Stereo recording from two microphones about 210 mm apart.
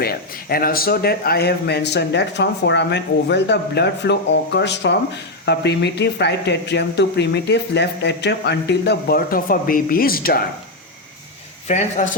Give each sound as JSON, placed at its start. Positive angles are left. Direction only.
{"t": 0.0, "sound": "speech", "side_deg": 45}
{"t": 11.7, "sound": "speech", "side_deg": 35}